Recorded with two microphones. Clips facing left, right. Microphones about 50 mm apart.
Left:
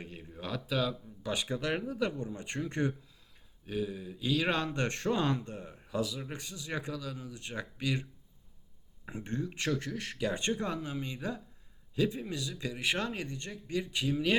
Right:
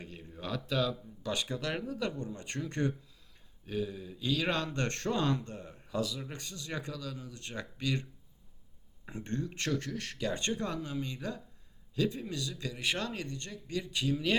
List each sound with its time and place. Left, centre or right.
0.0 s speech: centre
3.7 s speech: centre
9.0 s speech: centre